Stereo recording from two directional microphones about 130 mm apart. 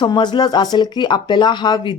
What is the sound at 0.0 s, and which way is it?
Speech, 35° left (ahead or behind).